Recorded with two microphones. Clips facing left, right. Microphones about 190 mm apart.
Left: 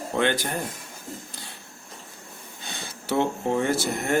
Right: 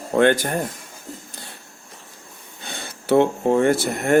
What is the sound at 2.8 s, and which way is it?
Speech, 55° right (ahead or behind).